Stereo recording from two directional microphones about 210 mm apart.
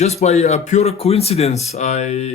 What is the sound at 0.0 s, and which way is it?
Speech, 30° left (ahead or behind).